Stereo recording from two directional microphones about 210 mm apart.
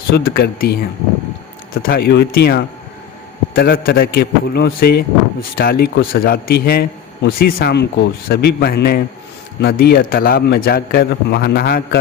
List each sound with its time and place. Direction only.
0.1 s a man's voice: 45° left (ahead or behind)